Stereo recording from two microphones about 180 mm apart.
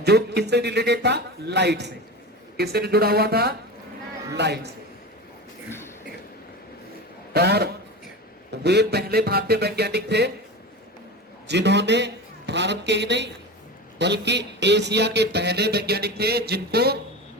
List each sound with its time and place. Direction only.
0.0 s speech: 65° right (ahead or behind)
2.6 s music: 60° right (ahead or behind)
4.4 s speech: 65° right (ahead or behind)
7.3 s music: 65° right (ahead or behind)
11.4 s a man's voice: 70° right (ahead or behind)